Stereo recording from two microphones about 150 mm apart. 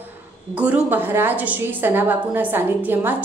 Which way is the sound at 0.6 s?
10° right (ahead or behind).